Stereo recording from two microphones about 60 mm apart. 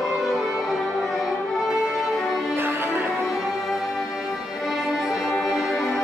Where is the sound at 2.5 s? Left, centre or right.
Right.